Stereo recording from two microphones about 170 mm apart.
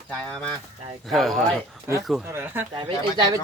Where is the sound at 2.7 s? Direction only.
25° right (ahead or behind).